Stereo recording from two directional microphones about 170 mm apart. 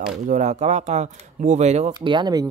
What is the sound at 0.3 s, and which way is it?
Speech, 45° right (ahead or behind).